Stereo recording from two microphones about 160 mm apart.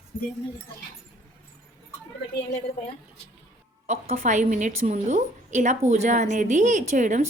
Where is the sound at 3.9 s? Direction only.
50° right (ahead or behind).